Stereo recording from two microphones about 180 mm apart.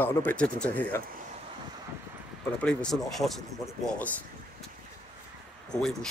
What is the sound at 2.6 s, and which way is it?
Speech, centre (ahead or behind).